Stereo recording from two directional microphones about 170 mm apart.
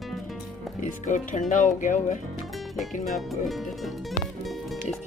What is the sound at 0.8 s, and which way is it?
Speech, 45° left (ahead or behind).